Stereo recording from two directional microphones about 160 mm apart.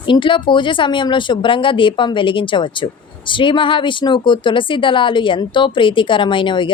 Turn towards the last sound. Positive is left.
turn(degrees=30)  # may be behind; listen again after turning